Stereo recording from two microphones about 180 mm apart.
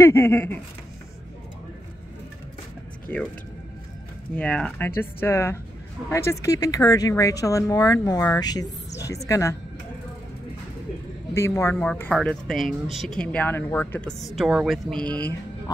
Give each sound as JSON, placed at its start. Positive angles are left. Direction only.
{"t": 0.0, "sound": "speech", "side_deg": 15}
{"t": 3.1, "sound": "speech", "side_deg": 5}
{"t": 4.4, "sound": "speech", "side_deg": 5}
{"t": 11.3, "sound": "a woman's voice", "side_deg": 15}
{"t": 14.2, "sound": "a woman's voice", "side_deg": 0}